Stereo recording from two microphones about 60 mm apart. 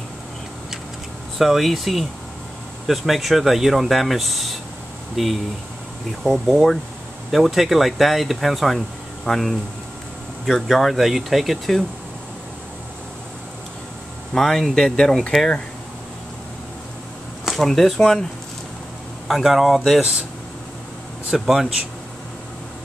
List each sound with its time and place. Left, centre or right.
1.4 s speech: centre
14.3 s speech: centre
17.5 s speech: centre
19.2 s speech: centre
20.0 s speech: centre
21.3 s speech: centre